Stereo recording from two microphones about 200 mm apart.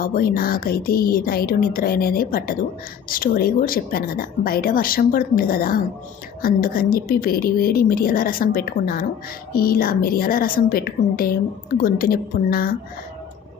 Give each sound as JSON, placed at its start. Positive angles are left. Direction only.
{"t": 0.0, "sound": "a woman's voice", "side_deg": 45}